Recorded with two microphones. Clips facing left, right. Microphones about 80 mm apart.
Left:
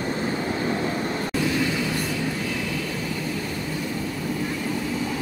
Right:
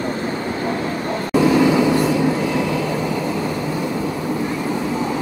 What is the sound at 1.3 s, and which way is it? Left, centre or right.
Vehicle, right.